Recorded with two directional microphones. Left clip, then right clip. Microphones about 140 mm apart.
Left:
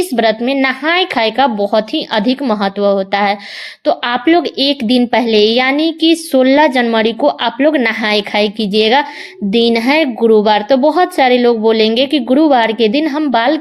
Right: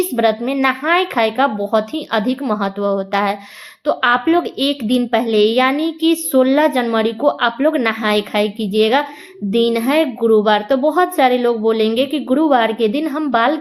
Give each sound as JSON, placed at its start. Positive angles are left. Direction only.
{"t": 0.2, "sound": "a woman's voice", "side_deg": 35}